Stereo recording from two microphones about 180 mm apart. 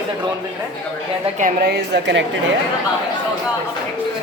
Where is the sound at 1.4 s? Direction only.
65° right (ahead or behind); by 2.2 s 80° right.